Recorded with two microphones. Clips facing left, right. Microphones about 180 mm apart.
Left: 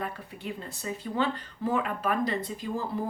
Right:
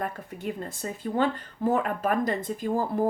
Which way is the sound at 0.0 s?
45° right (ahead or behind).